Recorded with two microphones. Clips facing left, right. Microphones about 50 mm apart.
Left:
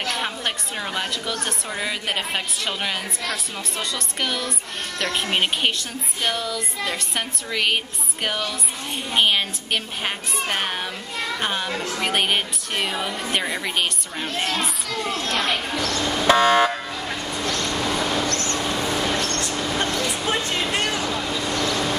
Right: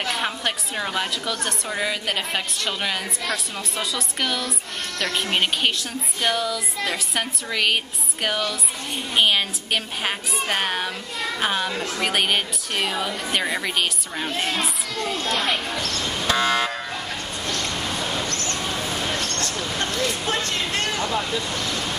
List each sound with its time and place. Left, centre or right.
0.1 s a woman's voice: centre
15.4 s speech: centre
16.1 s car alarm: left
17.4 s vehicle: left
18.6 s a sound: centre